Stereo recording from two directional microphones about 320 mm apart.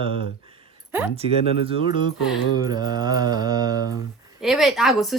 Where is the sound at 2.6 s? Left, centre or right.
Centre.